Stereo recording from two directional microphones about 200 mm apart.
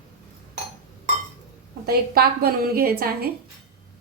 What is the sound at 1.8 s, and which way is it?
A woman's voice, 50° right (ahead or behind).